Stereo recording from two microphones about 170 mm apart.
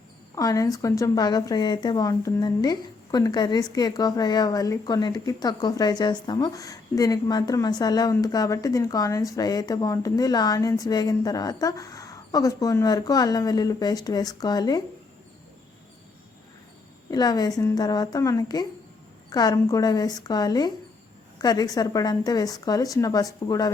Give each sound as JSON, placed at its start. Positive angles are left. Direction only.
{"t": 0.3, "sound": "a woman's voice", "side_deg": 20}
{"t": 17.1, "sound": "a woman's voice", "side_deg": 25}